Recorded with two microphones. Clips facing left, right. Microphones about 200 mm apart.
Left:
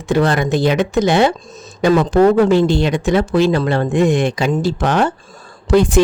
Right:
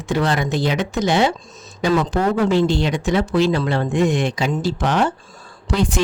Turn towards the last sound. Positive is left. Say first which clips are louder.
# left 8 dB
turn(degrees=50)  # may be behind; listen again after turning